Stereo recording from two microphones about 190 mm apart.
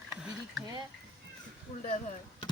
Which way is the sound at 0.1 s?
5° right (ahead or behind).